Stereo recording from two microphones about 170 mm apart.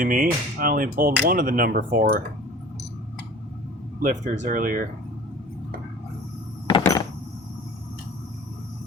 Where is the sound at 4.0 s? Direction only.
50° right (ahead or behind).